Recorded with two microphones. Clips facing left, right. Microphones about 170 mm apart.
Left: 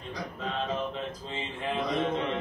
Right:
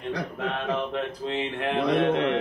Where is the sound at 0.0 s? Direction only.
65° right (ahead or behind).